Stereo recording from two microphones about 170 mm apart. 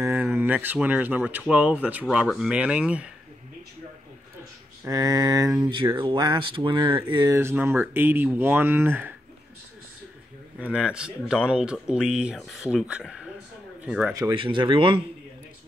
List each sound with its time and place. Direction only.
0.0 s speech: 15° right (ahead or behind)
4.8 s speech: 20° right (ahead or behind)
10.6 s speech: 5° right (ahead or behind)
14.3 s speech: 30° right (ahead or behind)